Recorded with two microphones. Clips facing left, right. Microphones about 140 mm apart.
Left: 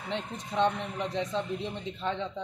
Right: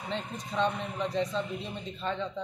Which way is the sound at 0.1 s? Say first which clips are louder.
Left 2 dB; 20° left (ahead or behind).